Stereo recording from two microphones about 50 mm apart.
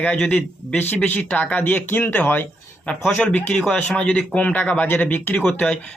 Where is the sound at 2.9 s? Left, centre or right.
Left.